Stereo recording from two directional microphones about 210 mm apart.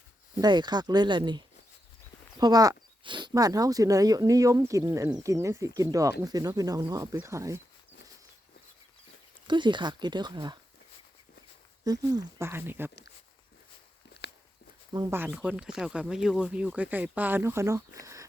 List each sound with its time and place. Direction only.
0.3 s speech: 20° right (ahead or behind)
9.5 s speech: 20° right (ahead or behind)
11.9 s speech: 15° right (ahead or behind)
14.9 s speech: 15° right (ahead or behind)
15.3 s speech: 5° right (ahead or behind)